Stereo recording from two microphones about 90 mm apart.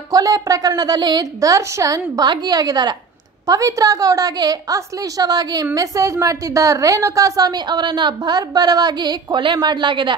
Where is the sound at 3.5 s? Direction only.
40° right (ahead or behind).